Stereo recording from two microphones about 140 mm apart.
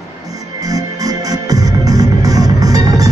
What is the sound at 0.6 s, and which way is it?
Music, 25° right (ahead or behind).